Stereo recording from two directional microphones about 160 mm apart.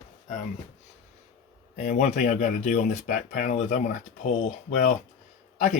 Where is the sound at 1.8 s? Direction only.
50° left (ahead or behind).